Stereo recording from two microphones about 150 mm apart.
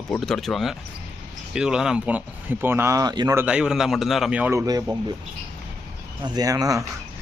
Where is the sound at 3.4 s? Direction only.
10° right (ahead or behind).